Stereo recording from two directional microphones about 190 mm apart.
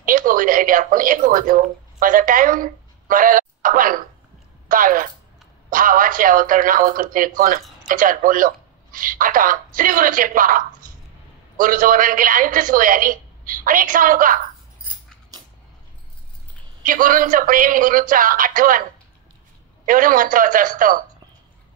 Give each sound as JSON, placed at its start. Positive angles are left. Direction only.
{"t": 0.0, "sound": "speech", "side_deg": -45}
{"t": 10.8, "sound": "a sound", "side_deg": -45}
{"t": 11.5, "sound": "speech", "side_deg": -45}
{"t": 16.8, "sound": "speech", "side_deg": -45}
{"t": 19.9, "sound": "speech", "side_deg": -45}